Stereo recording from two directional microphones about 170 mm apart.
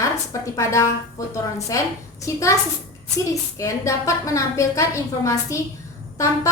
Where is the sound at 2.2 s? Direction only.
20° left (ahead or behind).